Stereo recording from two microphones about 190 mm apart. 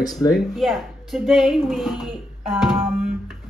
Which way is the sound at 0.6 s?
Centre (ahead or behind).